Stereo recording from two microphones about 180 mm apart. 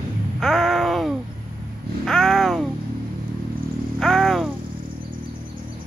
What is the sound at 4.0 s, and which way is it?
Vehicle, centre (ahead or behind).